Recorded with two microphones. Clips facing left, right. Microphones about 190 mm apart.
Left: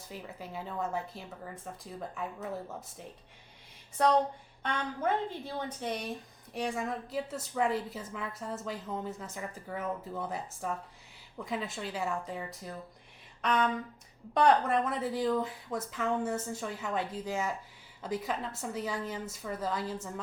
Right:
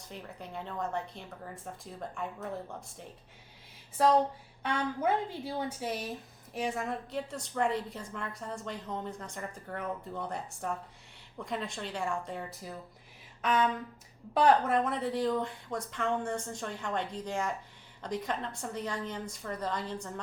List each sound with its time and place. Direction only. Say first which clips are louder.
0.0 s a woman's voice: left 1 dB; 5° left (ahead or behind)
3.9 s a woman's voice: right 1 dB; 5° right (ahead or behind)